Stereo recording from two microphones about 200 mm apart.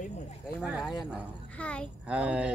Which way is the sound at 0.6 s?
Centre (ahead or behind).